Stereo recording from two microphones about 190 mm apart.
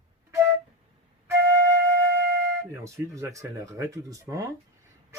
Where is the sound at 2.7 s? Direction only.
15° right (ahead or behind).